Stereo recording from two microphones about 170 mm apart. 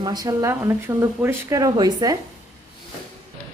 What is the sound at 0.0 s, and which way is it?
Speech, 25° right (ahead or behind).